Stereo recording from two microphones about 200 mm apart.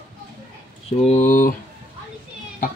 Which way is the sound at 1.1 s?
40° left (ahead or behind).